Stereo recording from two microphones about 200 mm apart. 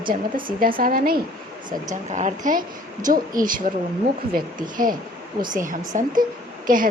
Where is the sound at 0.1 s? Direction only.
45° right (ahead or behind).